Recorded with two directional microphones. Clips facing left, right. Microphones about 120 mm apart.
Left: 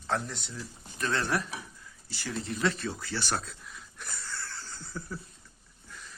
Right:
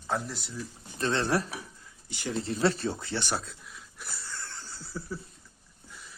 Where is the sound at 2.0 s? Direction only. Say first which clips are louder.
Right 4 dB; 20° right (ahead or behind).